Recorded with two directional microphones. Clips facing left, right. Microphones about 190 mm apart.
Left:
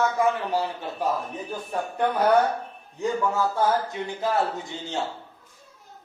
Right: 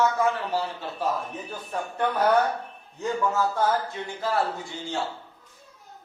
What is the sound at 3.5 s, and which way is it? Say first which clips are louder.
Speech: left 1 dB; 15° left (ahead or behind).